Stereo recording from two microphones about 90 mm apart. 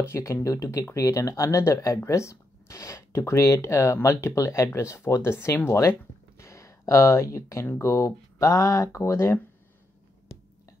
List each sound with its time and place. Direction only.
0.0 s speech: 30° left (ahead or behind)